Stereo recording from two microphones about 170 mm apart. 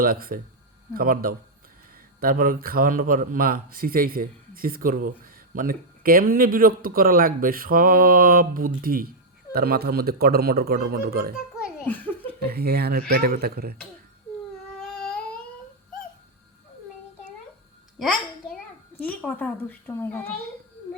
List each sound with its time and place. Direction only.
0.0 s speech: 60° right (ahead or behind)
12.4 s speech: 65° right (ahead or behind)
18.0 s a child's voice: 5° left (ahead or behind)